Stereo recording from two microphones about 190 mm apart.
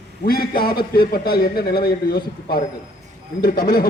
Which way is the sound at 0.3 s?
50° left (ahead or behind).